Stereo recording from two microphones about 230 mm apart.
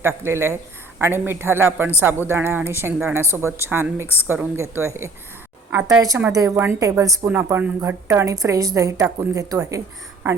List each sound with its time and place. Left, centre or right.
0.0 s a woman's voice: centre